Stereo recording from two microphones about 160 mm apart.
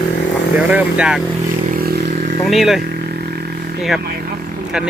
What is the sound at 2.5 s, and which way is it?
Speech, centre (ahead or behind).